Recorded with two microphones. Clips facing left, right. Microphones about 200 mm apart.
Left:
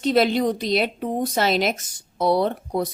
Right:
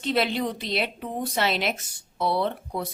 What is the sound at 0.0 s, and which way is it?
A woman's voice, 40° left (ahead or behind).